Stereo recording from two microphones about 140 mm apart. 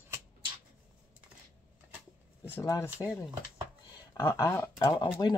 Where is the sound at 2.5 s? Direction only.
20° left (ahead or behind).